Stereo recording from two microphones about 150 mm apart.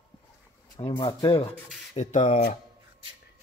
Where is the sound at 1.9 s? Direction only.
50° left (ahead or behind).